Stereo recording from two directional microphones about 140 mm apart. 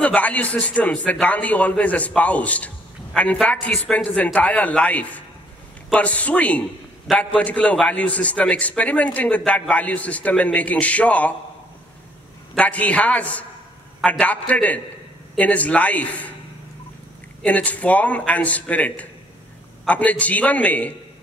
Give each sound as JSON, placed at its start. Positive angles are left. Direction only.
{"t": 0.0, "sound": "a man's voice", "side_deg": 10}
{"t": 12.5, "sound": "a man's voice", "side_deg": 10}
{"t": 17.4, "sound": "a man's voice", "side_deg": 10}